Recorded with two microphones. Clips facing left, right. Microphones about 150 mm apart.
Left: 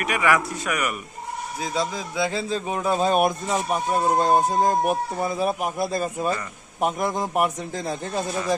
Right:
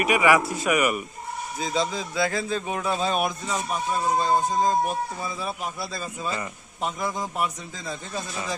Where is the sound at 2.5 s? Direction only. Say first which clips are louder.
Left 3 dB; 35° left (ahead or behind).